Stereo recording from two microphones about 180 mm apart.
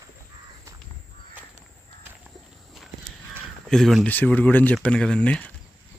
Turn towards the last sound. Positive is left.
turn(degrees=5)  # may be behind; listen again after turning